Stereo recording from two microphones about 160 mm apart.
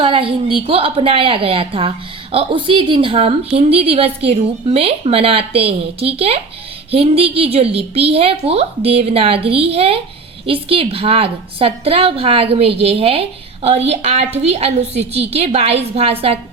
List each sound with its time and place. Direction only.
0.0 s a woman's voice: 35° right (ahead or behind)